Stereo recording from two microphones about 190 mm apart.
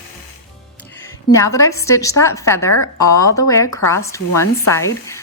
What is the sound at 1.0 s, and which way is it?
A woman's voice, 15° left (ahead or behind).